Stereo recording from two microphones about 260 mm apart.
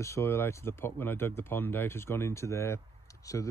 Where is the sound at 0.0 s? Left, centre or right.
Centre.